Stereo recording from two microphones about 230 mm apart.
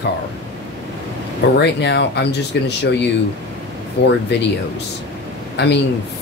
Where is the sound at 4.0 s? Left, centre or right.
Left.